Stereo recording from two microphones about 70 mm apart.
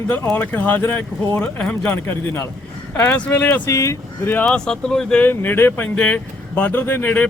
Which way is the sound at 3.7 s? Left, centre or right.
Left.